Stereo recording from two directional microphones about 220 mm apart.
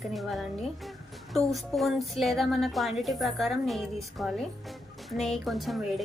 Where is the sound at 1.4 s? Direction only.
Centre (ahead or behind).